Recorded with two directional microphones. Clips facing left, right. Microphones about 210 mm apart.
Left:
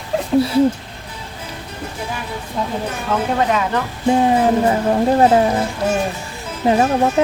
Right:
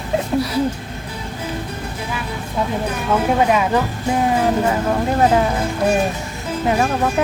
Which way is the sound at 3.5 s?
10° right (ahead or behind).